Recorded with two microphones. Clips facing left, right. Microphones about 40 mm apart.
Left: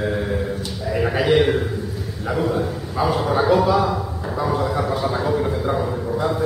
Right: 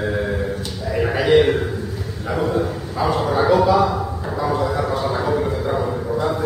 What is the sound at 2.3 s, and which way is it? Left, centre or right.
Bow-wow, centre.